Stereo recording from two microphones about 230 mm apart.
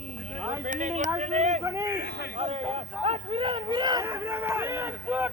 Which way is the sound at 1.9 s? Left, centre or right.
Left.